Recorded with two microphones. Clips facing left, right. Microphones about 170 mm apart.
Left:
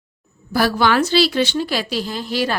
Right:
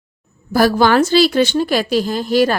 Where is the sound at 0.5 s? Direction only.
45° right (ahead or behind).